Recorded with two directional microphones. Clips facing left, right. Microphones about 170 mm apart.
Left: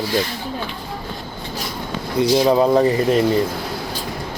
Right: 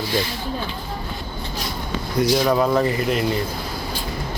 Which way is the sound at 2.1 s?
30° left (ahead or behind).